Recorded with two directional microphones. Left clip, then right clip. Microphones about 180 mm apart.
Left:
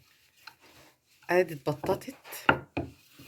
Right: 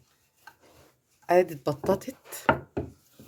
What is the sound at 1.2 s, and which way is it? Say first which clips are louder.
Speech: right 4 dB; 35° right (ahead or behind).